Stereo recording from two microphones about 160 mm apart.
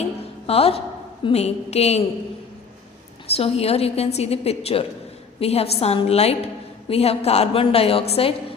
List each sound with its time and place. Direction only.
0.0 s a sound: 40° left (ahead or behind)
1.2 s a woman's voice: 40° left (ahead or behind)
3.3 s a woman's voice: 40° left (ahead or behind)